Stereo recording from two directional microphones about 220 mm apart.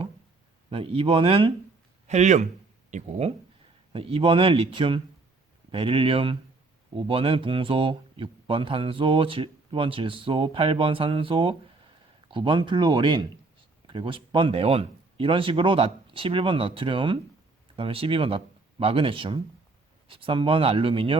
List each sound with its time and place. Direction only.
0.7 s a man's voice: 25° right (ahead or behind)